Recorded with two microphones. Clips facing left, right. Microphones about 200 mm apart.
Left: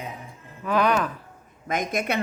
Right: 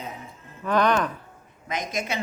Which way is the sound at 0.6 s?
5° left (ahead or behind).